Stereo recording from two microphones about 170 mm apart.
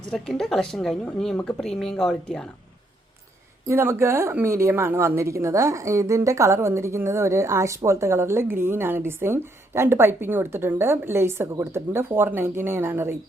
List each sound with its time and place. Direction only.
0.1 s a woman's voice: centre (ahead or behind)
3.7 s speech: 15° right (ahead or behind)